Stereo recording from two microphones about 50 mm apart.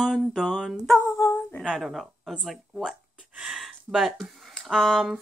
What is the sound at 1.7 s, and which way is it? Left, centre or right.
Speech, centre.